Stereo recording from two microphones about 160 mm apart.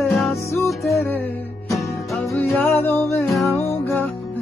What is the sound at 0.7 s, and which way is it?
Music, centre (ahead or behind).